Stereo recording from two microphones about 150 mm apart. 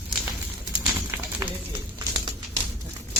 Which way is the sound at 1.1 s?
15° right (ahead or behind).